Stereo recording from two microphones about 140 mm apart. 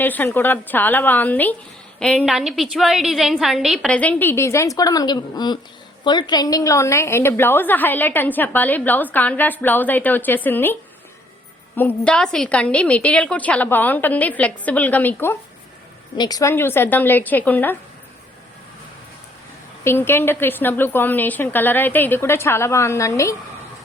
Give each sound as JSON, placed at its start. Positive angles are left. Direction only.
{"t": 0.0, "sound": "a woman's voice", "side_deg": 15}
{"t": 3.9, "sound": "a woman's voice", "side_deg": 10}
{"t": 11.8, "sound": "a woman's voice", "side_deg": 10}
{"t": 16.1, "sound": "a woman's voice", "side_deg": 30}
{"t": 19.8, "sound": "a woman's voice", "side_deg": 15}